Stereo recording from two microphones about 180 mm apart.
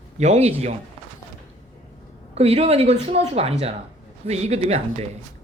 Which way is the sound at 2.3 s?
35° right (ahead or behind).